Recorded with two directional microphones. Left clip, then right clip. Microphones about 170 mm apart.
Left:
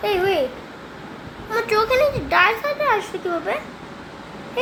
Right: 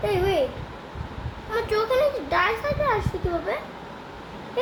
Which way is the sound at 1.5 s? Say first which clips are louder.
Left 5 dB; 20° left (ahead or behind).